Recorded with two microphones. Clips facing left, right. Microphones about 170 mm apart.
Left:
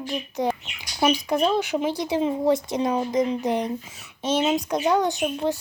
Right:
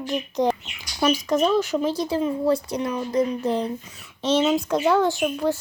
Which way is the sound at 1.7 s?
15° left (ahead or behind).